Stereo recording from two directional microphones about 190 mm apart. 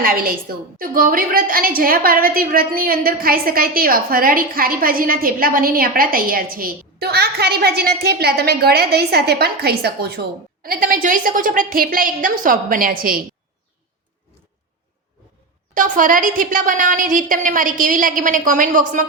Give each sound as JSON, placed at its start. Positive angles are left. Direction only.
{"t": 0.0, "sound": "a woman's voice", "side_deg": -50}
{"t": 15.7, "sound": "a woman's voice", "side_deg": -45}